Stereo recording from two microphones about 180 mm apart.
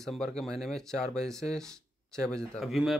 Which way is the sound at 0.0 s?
5° left (ahead or behind).